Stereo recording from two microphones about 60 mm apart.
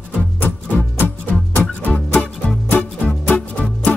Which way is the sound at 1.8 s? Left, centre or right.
Left.